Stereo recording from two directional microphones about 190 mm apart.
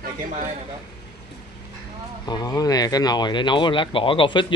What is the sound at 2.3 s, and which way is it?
Speech, 20° left (ahead or behind).